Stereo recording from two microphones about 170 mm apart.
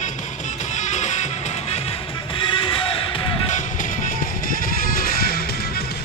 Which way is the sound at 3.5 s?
50° left (ahead or behind).